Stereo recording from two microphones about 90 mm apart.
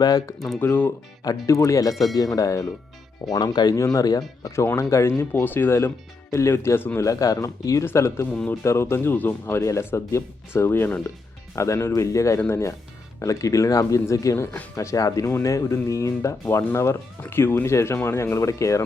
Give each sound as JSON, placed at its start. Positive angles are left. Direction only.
{"t": 0.0, "sound": "speech", "side_deg": 45}
{"t": 0.3, "sound": "speech", "side_deg": 0}
{"t": 0.6, "sound": "speech", "side_deg": 25}
{"t": 1.5, "sound": "speech", "side_deg": 35}
{"t": 4.4, "sound": "speech", "side_deg": 30}
{"t": 7.9, "sound": "speech", "side_deg": 30}
{"t": 8.3, "sound": "a man's voice", "side_deg": 15}
{"t": 8.6, "sound": "speech", "side_deg": 30}